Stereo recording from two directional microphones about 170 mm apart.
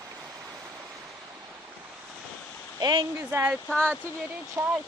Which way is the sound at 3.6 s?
5° left (ahead or behind).